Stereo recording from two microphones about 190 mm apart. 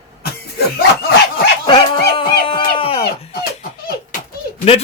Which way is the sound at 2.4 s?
25° left (ahead or behind).